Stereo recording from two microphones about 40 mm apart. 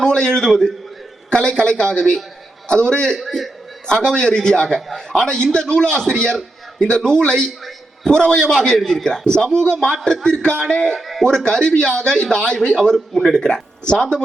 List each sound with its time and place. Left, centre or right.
0.0 s a man's voice: centre
3.2 s a man's voice: centre
3.8 s a man's voice: left
9.0 s a man's voice: left
10.9 s a man's voice: centre
11.2 s a man's voice: centre